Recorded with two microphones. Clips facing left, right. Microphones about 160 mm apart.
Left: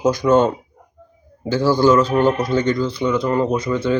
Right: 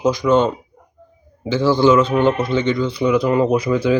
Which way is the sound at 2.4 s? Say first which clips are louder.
Even; 40° left (ahead or behind).